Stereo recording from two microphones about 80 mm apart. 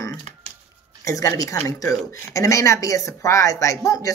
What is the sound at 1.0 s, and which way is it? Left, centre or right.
Speech, left.